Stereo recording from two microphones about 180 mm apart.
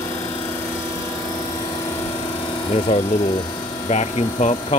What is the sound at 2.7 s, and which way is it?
Speech, 35° left (ahead or behind).